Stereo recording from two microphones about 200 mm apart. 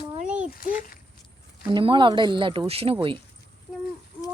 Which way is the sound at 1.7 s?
25° right (ahead or behind).